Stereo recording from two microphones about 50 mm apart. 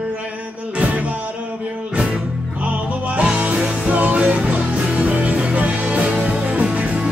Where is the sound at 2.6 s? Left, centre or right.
Right.